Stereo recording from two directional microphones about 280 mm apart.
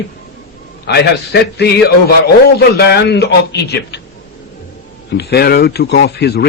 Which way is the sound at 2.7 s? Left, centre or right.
Left.